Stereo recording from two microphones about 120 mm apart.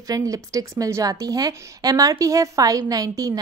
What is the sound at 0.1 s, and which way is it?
Speech, 30° right (ahead or behind).